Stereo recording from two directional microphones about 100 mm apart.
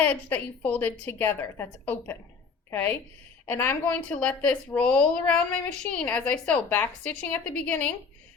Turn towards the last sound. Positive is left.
turn(degrees=10)  # may be behind; listen again after turning